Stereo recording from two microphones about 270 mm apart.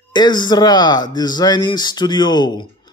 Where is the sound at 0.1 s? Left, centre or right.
Centre.